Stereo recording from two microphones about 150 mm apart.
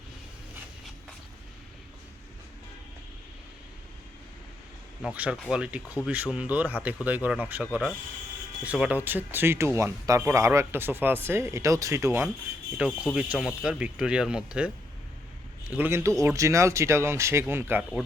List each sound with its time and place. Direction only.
5.0 s speech: 10° right (ahead or behind)
13.1 s speech: 5° right (ahead or behind)
15.7 s speech: 15° right (ahead or behind)